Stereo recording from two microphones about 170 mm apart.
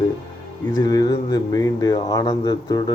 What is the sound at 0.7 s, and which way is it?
Speech, 20° left (ahead or behind).